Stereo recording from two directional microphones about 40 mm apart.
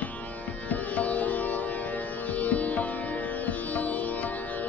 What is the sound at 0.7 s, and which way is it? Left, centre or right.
Sitar, left.